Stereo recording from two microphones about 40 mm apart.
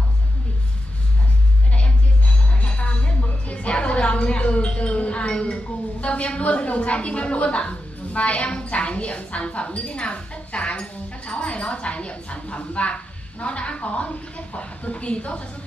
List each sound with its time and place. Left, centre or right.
2.5 s a woman's voice: left